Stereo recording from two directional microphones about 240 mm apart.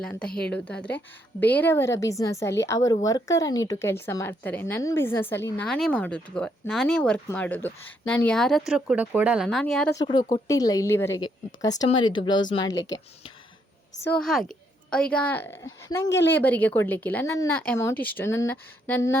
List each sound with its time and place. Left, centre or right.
0.0 s speech: centre
10.0 s speech: centre
14.0 s speech: centre